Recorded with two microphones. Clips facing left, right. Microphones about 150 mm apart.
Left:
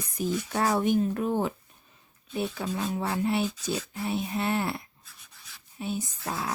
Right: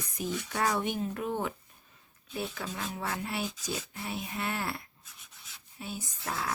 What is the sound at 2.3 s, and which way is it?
Speech, 20° left (ahead or behind).